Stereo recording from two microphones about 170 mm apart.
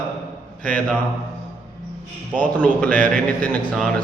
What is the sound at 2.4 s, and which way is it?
Speech, 10° left (ahead or behind).